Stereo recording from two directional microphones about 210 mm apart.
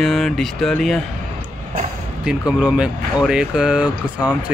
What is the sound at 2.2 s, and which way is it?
Speech, 5° right (ahead or behind).